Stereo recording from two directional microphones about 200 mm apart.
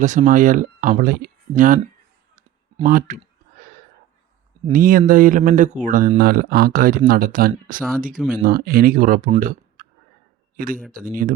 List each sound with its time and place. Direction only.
0.0 s speech: 40° right (ahead or behind)
2.8 s speech: 40° right (ahead or behind)
4.7 s speech: 45° right (ahead or behind)
9.4 s a sound: 45° right (ahead or behind)
10.6 s speech: 45° right (ahead or behind)